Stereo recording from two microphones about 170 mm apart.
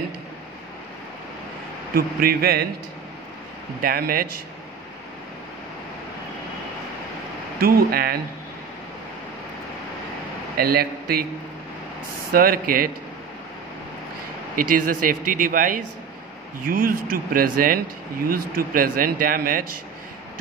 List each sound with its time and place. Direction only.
2.0 s a man's voice: 60° right (ahead or behind)
3.8 s a man's voice: 60° right (ahead or behind)
7.6 s a man's voice: 60° right (ahead or behind)
10.6 s a man's voice: 65° right (ahead or behind)
12.3 s a man's voice: 60° right (ahead or behind)
14.5 s a man's voice: 55° right (ahead or behind)